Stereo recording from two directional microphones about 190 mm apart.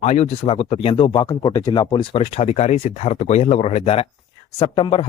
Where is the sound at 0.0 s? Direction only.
35° left (ahead or behind).